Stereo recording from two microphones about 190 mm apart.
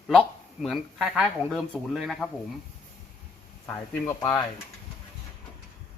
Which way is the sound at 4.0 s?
20° left (ahead or behind).